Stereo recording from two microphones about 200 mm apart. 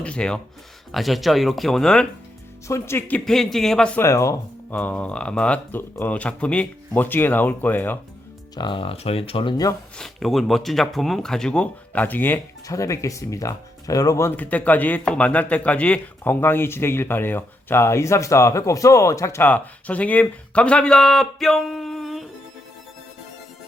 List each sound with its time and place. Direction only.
0.0 s speech: 5° left (ahead or behind)
2.6 s speech: 15° left (ahead or behind)
8.5 s speech: 25° left (ahead or behind)
10.0 s speech: centre (ahead or behind)